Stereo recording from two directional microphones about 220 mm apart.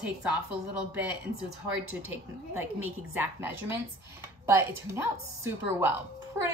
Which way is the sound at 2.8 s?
10° right (ahead or behind).